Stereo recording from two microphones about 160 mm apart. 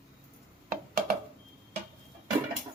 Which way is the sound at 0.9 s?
70° right (ahead or behind).